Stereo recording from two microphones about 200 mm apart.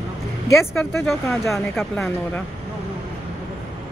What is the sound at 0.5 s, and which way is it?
A woman's voice, centre (ahead or behind).